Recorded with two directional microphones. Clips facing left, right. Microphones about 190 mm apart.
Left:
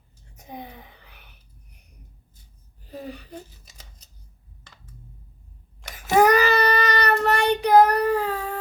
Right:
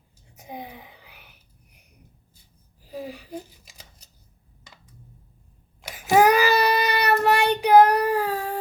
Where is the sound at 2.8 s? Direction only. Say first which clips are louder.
Right 1 dB; 10° right (ahead or behind).